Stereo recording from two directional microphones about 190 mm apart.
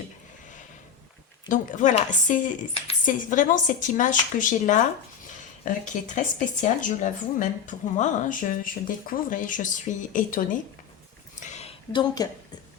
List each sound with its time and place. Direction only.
1.5 s speech: 45° left (ahead or behind)
11.3 s a sound: 35° left (ahead or behind)
11.9 s a woman's voice: 20° left (ahead or behind)